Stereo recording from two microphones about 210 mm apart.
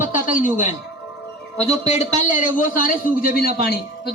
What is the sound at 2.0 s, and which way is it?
A man's voice, 35° left (ahead or behind).